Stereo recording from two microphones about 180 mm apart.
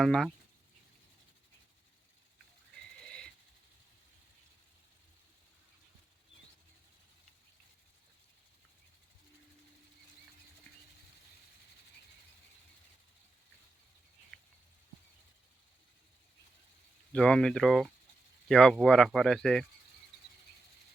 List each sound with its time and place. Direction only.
0.0 s speech: centre (ahead or behind)
3.0 s a sound: 5° left (ahead or behind)
17.1 s speech: 5° left (ahead or behind)